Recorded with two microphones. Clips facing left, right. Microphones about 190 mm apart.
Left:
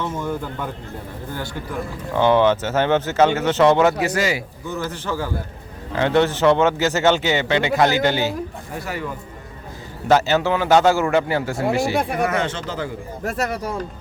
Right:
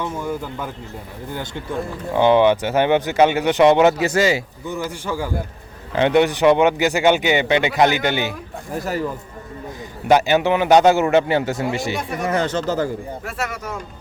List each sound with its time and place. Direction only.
0.0 s speech: 10° right (ahead or behind)
1.3 s a man's voice: 20° right (ahead or behind)
4.7 s speech: 15° right (ahead or behind)
8.8 s speech: 40° right (ahead or behind)
10.1 s a man's voice: 15° right (ahead or behind)
12.3 s speech: 40° right (ahead or behind)
13.2 s speech: 40° left (ahead or behind)